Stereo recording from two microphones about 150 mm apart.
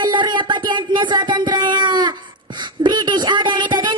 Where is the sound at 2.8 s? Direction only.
30° right (ahead or behind).